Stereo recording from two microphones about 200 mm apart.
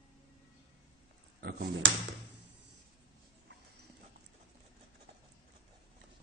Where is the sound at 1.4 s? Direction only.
55° right (ahead or behind).